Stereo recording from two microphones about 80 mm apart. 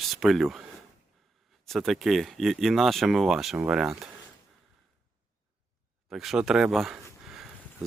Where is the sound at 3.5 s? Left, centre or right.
Centre.